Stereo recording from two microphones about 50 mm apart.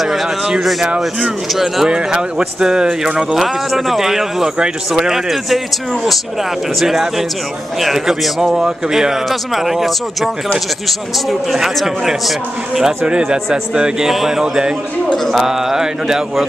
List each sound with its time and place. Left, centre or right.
0.0 s a sound: centre
0.5 s speech: centre
0.8 s speech: centre
1.5 s speech: centre
1.9 s speech: centre
3.3 s speech: centre
6.8 s speech: centre